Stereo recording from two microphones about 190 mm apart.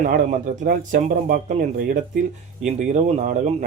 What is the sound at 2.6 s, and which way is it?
Speech, 40° right (ahead or behind).